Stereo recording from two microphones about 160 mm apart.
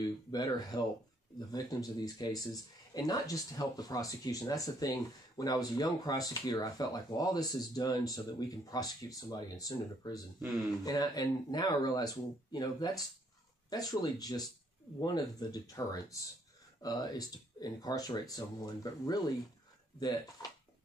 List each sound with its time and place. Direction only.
0.0 s speech: 25° left (ahead or behind)